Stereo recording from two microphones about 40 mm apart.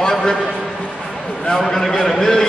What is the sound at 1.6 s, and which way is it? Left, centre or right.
Speech, centre.